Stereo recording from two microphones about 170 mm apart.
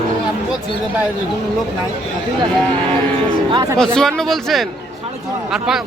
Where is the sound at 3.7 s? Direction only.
5° left (ahead or behind).